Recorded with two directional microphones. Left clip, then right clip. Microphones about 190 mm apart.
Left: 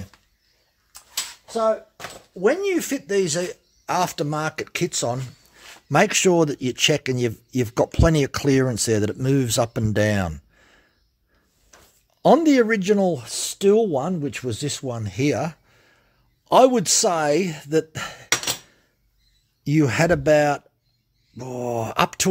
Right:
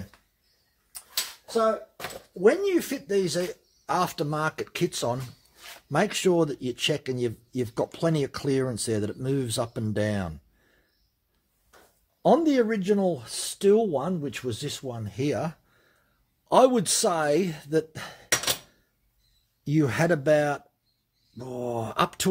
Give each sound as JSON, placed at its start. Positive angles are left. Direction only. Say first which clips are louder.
{"t": 2.4, "sound": "speech", "louder": "left 1 dB", "side_deg": 25}
{"t": 5.9, "sound": "speech", "louder": "left 7 dB", "side_deg": 45}
{"t": 12.2, "sound": "speech", "louder": "left 5 dB", "side_deg": 45}
{"t": 19.6, "sound": "speech", "louder": "left 5 dB", "side_deg": 35}